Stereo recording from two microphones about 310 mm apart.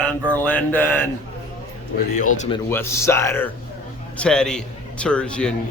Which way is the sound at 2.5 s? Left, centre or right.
Centre.